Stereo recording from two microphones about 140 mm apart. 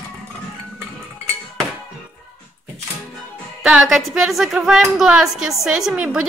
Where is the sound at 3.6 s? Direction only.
5° right (ahead or behind).